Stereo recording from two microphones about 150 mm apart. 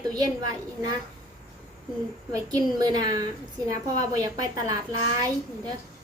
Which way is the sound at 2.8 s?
25° right (ahead or behind).